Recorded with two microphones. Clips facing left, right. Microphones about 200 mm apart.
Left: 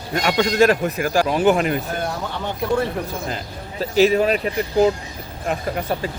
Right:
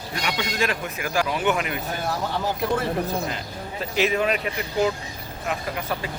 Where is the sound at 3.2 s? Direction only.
35° left (ahead or behind).